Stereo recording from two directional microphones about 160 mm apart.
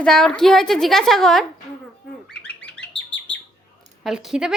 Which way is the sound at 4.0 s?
Centre (ahead or behind).